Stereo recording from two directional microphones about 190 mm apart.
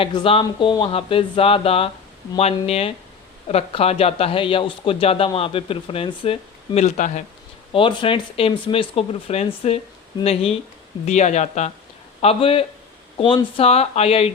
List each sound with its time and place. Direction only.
0.0 s speech: 25° left (ahead or behind); by 7.3 s 40° left (ahead or behind)
7.7 s speech: 25° left (ahead or behind)